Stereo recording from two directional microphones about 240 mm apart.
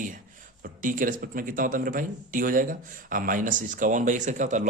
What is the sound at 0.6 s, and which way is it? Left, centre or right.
Speech, right.